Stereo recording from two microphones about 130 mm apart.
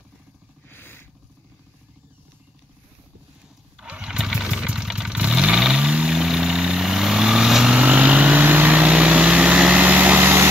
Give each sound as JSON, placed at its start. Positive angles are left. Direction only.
{"t": 0.7, "sound": "purr", "side_deg": 15}
{"t": 3.7, "sound": "vehicle", "side_deg": -10}